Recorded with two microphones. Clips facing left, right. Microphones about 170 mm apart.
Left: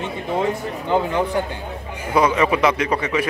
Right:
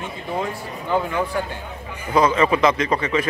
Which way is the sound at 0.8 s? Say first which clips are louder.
Left 2 dB; 20° left (ahead or behind).